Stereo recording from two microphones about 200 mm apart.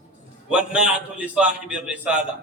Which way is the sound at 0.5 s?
5° right (ahead or behind).